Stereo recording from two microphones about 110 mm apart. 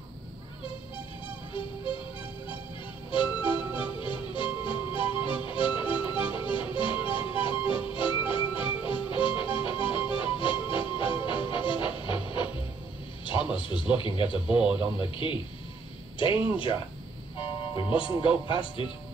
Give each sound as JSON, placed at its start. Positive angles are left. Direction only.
{"t": 3.1, "sound": "music", "side_deg": 50}
{"t": 13.2, "sound": "a sound", "side_deg": 50}
{"t": 13.6, "sound": "speech", "side_deg": 50}
{"t": 14.6, "sound": "speech", "side_deg": -10}
{"t": 15.0, "sound": "speech", "side_deg": 50}
{"t": 17.4, "sound": "speech", "side_deg": 50}